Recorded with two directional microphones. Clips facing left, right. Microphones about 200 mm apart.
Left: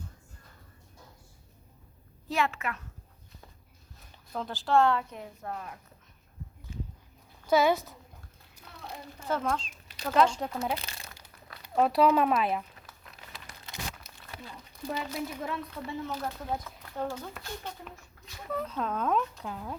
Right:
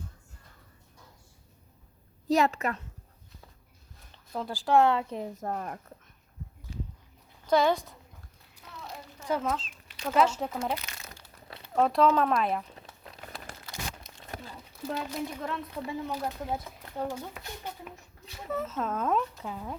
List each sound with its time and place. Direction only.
2.3 s a woman's voice: 40° right (ahead or behind)
4.3 s speech: 10° right (ahead or behind); by 5.8 s 50° right (ahead or behind)
7.4 s a woman's voice: 5° left (ahead or behind)
9.2 s speech: 10° right (ahead or behind)
12.7 s crumpling: 30° right (ahead or behind)
13.2 s tearing: 50° right (ahead or behind)
14.5 s a sound: 5° right (ahead or behind)
14.8 s speech: 5° left (ahead or behind)
15.7 s speech: 15° right (ahead or behind)